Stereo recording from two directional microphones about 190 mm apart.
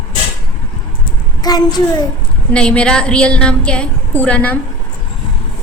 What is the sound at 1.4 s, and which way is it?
Speech, 20° left (ahead or behind).